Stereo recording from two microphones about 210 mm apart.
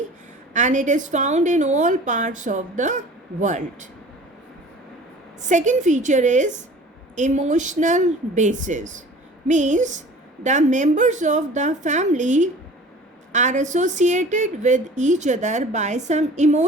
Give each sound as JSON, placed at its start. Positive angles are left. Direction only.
{"t": 0.5, "sound": "a woman's voice", "side_deg": -35}
{"t": 5.4, "sound": "a woman's voice", "side_deg": -35}